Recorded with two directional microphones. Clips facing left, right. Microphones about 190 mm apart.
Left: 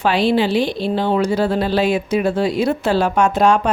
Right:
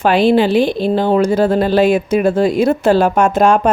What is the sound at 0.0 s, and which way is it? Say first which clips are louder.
A woman's voice: right 5 dB; 50° right (ahead or behind).